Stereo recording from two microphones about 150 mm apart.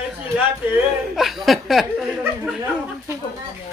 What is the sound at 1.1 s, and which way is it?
Chuckle, centre (ahead or behind).